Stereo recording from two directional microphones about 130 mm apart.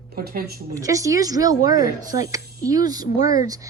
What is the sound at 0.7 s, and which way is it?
Speech, 25° right (ahead or behind).